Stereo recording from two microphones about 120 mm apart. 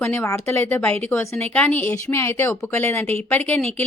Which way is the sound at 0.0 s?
20° left (ahead or behind).